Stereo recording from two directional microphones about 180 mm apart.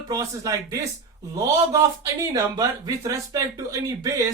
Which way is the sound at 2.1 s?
20° right (ahead or behind).